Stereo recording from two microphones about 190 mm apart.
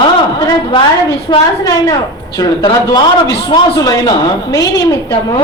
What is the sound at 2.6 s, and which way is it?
A woman's voice, 25° left (ahead or behind).